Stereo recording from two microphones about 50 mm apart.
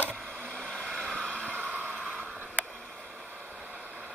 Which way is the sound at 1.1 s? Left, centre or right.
Right.